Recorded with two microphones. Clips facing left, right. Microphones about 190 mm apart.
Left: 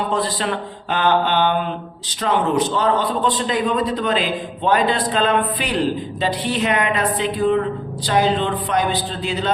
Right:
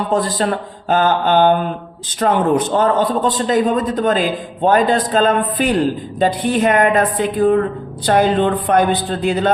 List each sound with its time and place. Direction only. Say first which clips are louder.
0.1 s a man's voice: right 4 dB; 45° right (ahead or behind)